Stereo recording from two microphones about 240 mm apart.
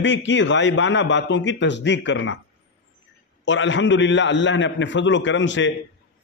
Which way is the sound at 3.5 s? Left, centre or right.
Left.